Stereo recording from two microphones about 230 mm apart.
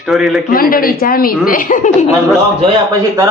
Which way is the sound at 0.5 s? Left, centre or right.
Left.